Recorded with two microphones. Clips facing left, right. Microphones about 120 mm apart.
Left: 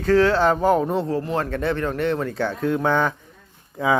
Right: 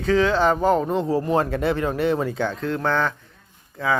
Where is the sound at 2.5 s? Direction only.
10° left (ahead or behind).